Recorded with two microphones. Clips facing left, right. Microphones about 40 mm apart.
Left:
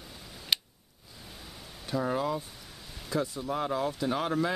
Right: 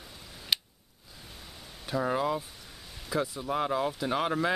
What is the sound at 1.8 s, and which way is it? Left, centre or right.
Speech, centre.